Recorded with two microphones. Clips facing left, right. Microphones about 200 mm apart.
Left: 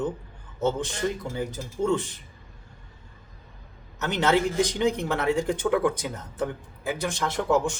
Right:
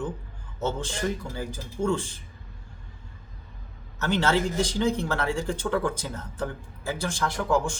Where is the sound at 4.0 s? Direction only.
20° left (ahead or behind).